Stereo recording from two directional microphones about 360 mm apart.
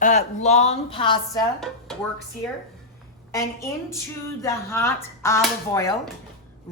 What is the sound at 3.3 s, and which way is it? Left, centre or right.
Speech, centre.